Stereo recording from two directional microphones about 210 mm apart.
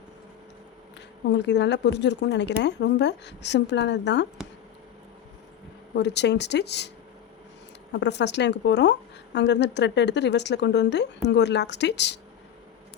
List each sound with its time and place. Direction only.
1.3 s a woman's voice: 55° left (ahead or behind)
5.9 s a woman's voice: 55° left (ahead or behind)
7.9 s a woman's voice: 55° left (ahead or behind)